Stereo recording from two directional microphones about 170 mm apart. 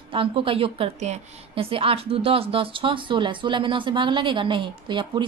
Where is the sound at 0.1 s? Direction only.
30° right (ahead or behind).